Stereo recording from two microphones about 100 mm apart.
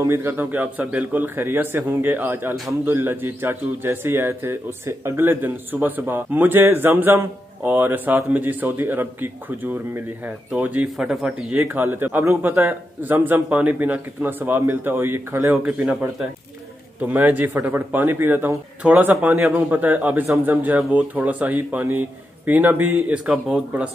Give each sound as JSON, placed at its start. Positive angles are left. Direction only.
{"t": 0.0, "sound": "speech", "side_deg": -25}
{"t": 15.5, "sound": "speech", "side_deg": -10}
{"t": 17.0, "sound": "speech", "side_deg": -20}